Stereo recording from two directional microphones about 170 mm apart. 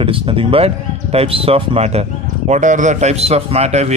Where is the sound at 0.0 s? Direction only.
30° right (ahead or behind).